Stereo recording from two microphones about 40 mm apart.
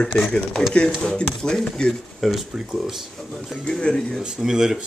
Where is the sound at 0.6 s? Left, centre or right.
Left.